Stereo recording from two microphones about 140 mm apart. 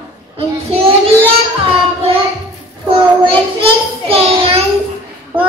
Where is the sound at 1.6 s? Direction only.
40° right (ahead or behind).